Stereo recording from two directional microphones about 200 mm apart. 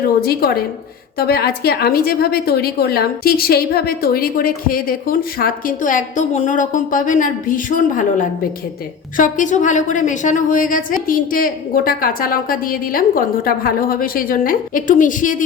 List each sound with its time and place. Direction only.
0.3 s a woman's voice: 50° left (ahead or behind)